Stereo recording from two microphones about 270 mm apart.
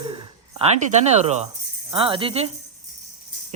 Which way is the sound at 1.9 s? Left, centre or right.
Centre.